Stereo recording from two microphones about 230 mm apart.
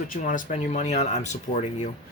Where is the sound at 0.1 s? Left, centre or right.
Left.